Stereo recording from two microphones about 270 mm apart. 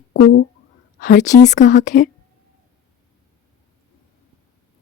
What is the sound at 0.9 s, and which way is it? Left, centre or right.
Speech, left.